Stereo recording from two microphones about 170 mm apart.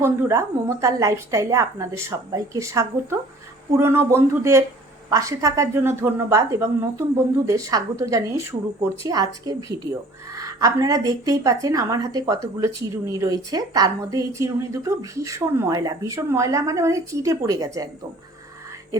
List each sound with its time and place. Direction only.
0.0 s a woman's voice: 15° right (ahead or behind)